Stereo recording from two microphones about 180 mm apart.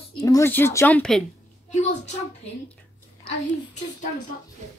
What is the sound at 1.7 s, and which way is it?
Speech, 40° left (ahead or behind).